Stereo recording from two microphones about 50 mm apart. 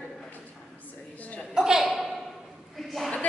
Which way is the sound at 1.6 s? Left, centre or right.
Centre.